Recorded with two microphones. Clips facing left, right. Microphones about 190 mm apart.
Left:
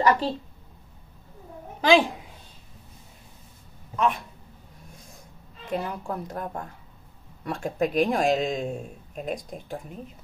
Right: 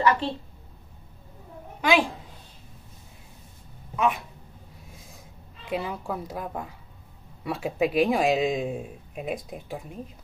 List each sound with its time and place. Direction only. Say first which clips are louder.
0.2 s a woman's voice: left 2 dB; 40° left (ahead or behind)
1.8 s a child's voice: left 3 dB; 30° left (ahead or behind)
3.9 s speech: even; 10° right (ahead or behind)
4.8 s snort: left 2 dB; centre (ahead or behind)
5.7 s speech: even; centre (ahead or behind)